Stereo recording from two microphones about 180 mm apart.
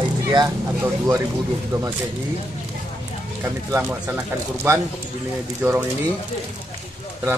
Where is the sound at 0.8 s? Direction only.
15° right (ahead or behind).